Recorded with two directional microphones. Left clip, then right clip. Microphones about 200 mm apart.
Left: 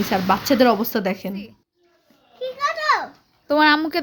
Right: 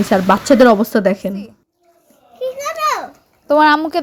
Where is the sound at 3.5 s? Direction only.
10° right (ahead or behind).